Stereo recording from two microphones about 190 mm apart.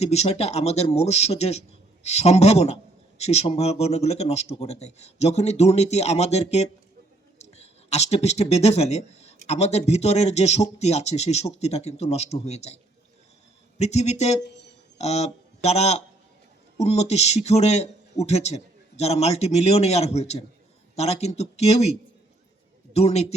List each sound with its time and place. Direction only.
0.0 s a man's voice: 35° left (ahead or behind)